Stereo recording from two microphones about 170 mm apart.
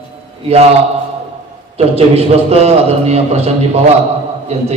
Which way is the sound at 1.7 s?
35° right (ahead or behind).